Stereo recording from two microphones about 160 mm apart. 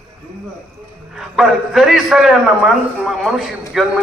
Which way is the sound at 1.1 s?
Centre (ahead or behind).